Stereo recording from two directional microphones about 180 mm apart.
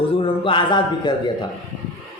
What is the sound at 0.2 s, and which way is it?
A man's voice, 25° left (ahead or behind).